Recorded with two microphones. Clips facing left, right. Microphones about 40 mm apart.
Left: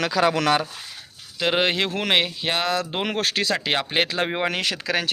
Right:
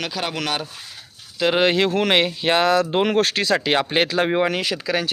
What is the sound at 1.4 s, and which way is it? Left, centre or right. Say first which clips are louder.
Speech: right 4 dB; centre.